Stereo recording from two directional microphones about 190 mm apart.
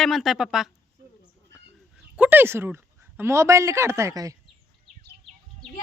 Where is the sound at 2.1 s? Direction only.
10° right (ahead or behind).